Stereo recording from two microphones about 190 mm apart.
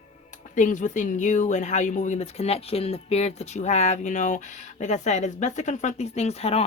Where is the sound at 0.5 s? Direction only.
40° left (ahead or behind).